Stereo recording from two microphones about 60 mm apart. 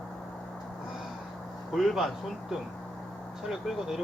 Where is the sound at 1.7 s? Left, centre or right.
Centre.